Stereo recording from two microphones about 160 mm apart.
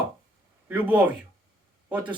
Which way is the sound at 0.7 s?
10° right (ahead or behind).